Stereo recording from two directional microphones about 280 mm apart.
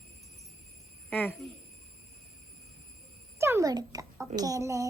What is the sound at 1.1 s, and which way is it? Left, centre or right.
Speech, centre.